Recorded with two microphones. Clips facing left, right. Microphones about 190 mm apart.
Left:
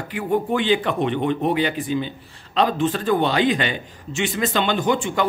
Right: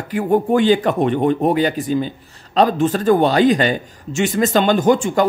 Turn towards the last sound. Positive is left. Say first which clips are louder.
# right 6 dB
turn(degrees=-45)  # may be behind; listen again after turning